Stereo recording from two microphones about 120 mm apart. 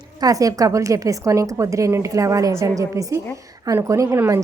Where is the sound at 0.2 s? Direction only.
30° right (ahead or behind).